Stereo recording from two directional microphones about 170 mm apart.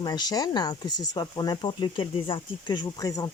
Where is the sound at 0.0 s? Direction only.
25° left (ahead or behind).